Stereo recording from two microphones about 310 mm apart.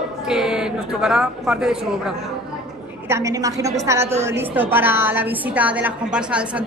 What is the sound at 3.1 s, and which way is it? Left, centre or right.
A woman's voice, centre.